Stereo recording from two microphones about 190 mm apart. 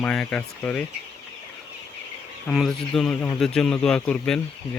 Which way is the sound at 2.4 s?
Centre (ahead or behind).